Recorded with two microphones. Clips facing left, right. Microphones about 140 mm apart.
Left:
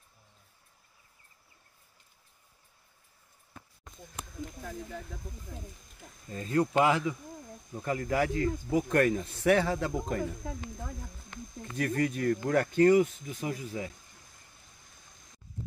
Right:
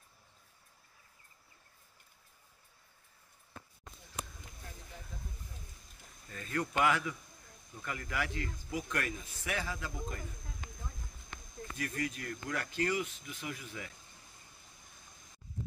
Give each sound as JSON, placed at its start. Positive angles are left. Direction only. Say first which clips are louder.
{"t": 4.6, "sound": "speech", "louder": "left 9 dB", "side_deg": 90}
{"t": 6.2, "sound": "speech", "louder": "left 9 dB", "side_deg": 30}
{"t": 10.4, "sound": "speech", "louder": "left 13 dB", "side_deg": 90}
{"t": 11.7, "sound": "speech", "louder": "left 9 dB", "side_deg": 35}